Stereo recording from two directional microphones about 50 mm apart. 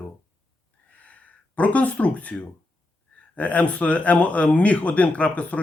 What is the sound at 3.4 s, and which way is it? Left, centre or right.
Speech, left.